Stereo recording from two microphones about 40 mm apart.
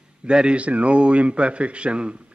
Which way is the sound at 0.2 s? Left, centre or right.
Right.